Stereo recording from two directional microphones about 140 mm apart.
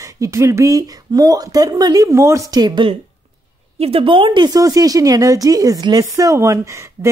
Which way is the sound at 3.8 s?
45° right (ahead or behind).